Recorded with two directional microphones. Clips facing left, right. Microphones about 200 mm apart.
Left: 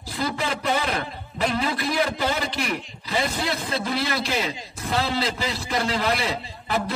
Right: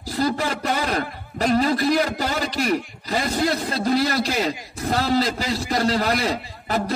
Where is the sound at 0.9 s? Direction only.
40° right (ahead or behind).